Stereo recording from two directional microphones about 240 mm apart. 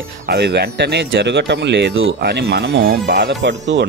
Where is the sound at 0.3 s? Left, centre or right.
Right.